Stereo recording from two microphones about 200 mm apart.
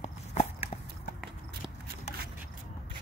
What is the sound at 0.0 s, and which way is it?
Clip-clop, 35° left (ahead or behind).